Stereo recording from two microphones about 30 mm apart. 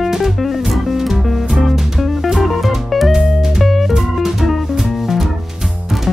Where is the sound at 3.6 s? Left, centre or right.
Centre.